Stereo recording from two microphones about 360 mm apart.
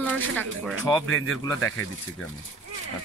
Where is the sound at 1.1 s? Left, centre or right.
Left.